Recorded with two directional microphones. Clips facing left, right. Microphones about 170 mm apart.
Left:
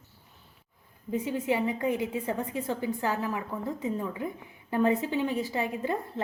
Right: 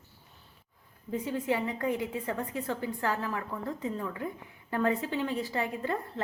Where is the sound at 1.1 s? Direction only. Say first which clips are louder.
Left 2 dB; 20° left (ahead or behind).